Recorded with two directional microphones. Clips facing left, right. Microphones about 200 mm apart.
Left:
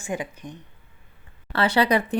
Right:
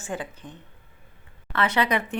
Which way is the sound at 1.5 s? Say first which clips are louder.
Left 3 dB; 30° left (ahead or behind).